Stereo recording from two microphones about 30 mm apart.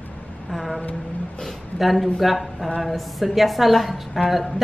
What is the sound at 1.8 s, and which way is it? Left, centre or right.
A woman's voice, centre.